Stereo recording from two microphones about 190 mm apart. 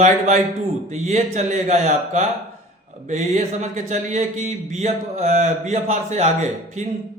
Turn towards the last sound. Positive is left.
turn(degrees=-40)  # may be behind; listen again after turning